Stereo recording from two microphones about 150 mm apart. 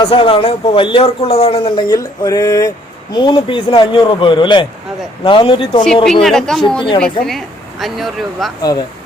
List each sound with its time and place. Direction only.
0.0 s speech: 35° left (ahead or behind)
2.0 s speech: 25° left (ahead or behind)
6.2 s speech: centre (ahead or behind)
6.7 s speech: 35° left (ahead or behind)
7.0 s speech: centre (ahead or behind)